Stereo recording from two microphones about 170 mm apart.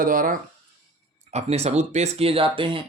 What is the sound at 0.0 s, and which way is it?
Speech, 55° right (ahead or behind).